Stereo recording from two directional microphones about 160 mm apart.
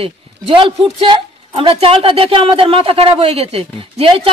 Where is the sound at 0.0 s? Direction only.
35° right (ahead or behind).